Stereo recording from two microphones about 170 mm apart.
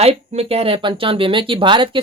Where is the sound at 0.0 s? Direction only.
35° right (ahead or behind).